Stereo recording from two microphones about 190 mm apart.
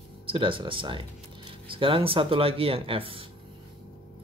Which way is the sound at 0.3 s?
25° right (ahead or behind).